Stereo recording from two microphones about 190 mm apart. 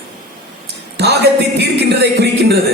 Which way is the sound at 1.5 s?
60° right (ahead or behind).